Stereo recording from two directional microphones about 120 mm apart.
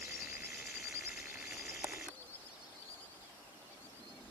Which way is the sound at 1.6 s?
20° right (ahead or behind).